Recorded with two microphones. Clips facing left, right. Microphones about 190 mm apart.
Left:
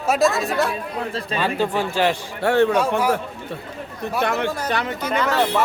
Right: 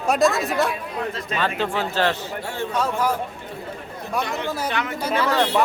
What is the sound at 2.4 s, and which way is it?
Speech, 70° left (ahead or behind).